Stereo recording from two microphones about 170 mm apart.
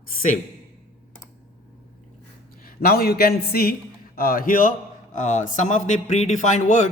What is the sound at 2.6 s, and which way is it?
A man's voice, 60° left (ahead or behind).